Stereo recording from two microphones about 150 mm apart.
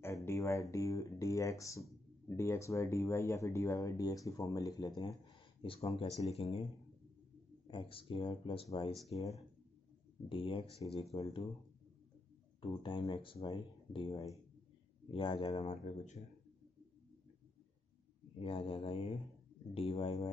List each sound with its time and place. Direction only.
0.0 s speech: 15° left (ahead or behind); by 6.6 s 45° left (ahead or behind)
7.6 s speech: 35° left (ahead or behind)
10.3 s speech: 35° left (ahead or behind)
12.8 s speech: 35° left (ahead or behind)
15.6 s speech: 45° left (ahead or behind)
18.4 s speech: 40° left (ahead or behind)